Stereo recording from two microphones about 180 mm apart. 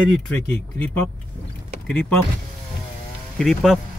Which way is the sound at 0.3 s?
10° left (ahead or behind).